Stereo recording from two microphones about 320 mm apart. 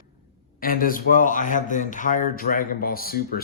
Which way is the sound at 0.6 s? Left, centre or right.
Left.